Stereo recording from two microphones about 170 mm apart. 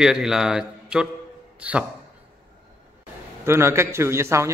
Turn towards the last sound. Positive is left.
turn(degrees=-15)  # may be behind; listen again after turning